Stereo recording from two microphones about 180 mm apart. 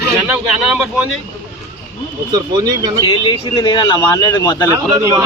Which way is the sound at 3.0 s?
25° left (ahead or behind).